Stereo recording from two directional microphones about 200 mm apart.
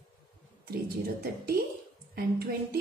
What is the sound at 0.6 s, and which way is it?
A woman's voice, 50° right (ahead or behind).